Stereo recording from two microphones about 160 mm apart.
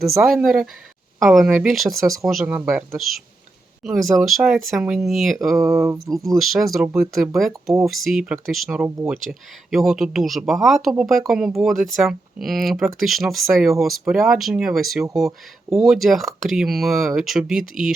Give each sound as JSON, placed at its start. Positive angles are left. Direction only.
{"t": 0.2, "sound": "speech", "side_deg": -5}
{"t": 5.5, "sound": "speech", "side_deg": -20}
{"t": 6.4, "sound": "speech", "side_deg": 0}